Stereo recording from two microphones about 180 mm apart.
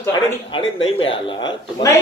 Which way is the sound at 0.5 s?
30° left (ahead or behind).